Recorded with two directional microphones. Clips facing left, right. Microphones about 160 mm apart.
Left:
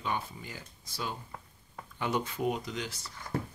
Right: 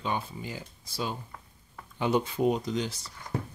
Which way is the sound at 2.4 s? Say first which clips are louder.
Right 6 dB; 30° right (ahead or behind).